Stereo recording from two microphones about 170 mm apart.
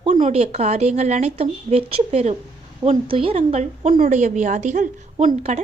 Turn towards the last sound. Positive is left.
turn(degrees=-40)  # may be behind; listen again after turning